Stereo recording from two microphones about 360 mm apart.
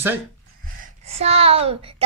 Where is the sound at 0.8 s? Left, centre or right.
Centre.